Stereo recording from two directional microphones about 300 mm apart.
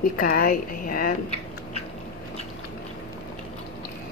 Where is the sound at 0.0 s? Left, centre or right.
Left.